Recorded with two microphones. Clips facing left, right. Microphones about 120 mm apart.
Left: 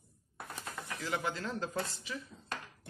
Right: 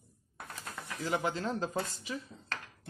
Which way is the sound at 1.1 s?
20° right (ahead or behind).